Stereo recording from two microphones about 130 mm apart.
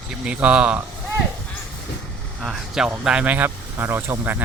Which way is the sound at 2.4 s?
5° right (ahead or behind).